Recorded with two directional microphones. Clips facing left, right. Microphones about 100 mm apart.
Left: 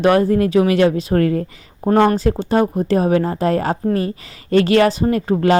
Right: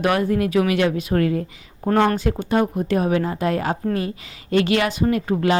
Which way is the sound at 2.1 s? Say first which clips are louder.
Left 4 dB; 35° left (ahead or behind).